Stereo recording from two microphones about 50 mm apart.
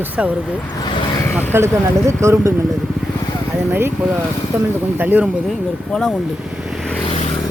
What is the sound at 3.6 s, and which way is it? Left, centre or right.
Speech, right.